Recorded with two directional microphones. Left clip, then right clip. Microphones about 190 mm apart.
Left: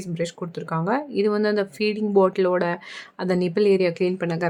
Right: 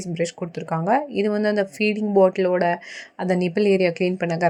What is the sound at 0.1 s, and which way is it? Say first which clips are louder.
A woman's voice: right 3 dB; 10° right (ahead or behind).